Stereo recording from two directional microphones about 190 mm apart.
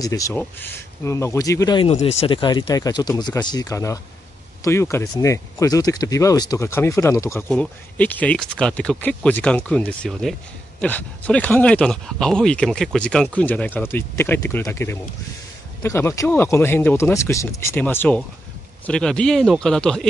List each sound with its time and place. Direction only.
0.0 s speech: 15° left (ahead or behind)
1.8 s speech: 35° left (ahead or behind); by 7.4 s 15° left (ahead or behind)
7.4 s speech: 5° left (ahead or behind)